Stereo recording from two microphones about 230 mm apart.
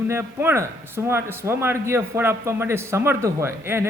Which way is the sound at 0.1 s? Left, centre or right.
Centre.